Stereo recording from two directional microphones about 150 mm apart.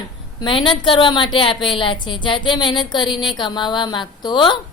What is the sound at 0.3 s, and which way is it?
A woman's voice, 35° left (ahead or behind).